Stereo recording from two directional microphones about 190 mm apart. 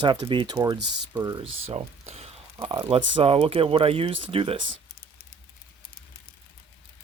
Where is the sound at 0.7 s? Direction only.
65° right (ahead or behind).